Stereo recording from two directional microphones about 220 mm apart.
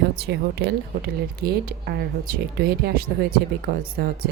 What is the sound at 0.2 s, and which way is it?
Speech, 50° right (ahead or behind).